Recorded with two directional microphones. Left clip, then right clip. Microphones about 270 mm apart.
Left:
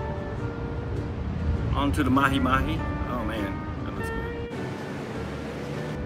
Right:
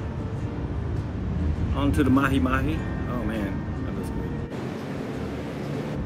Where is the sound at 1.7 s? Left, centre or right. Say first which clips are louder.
Right 1 dB; centre.